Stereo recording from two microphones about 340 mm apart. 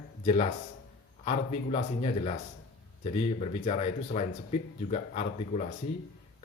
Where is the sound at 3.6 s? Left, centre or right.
Centre.